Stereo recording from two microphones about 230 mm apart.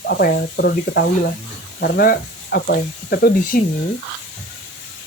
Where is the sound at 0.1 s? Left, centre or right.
Left.